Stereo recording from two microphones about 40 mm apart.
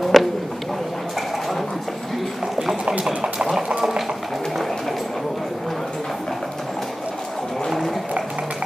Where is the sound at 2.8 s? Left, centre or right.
Right.